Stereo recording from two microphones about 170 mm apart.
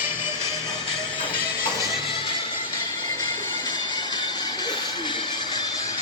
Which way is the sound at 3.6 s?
25° left (ahead or behind).